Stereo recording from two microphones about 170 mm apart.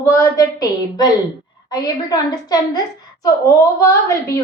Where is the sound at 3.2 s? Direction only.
20° left (ahead or behind).